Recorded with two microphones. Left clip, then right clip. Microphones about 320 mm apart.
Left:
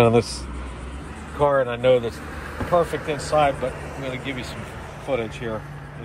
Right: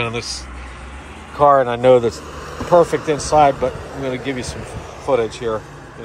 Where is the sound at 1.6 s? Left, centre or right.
Right.